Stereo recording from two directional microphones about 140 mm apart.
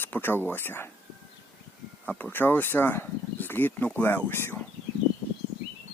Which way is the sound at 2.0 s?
15° left (ahead or behind).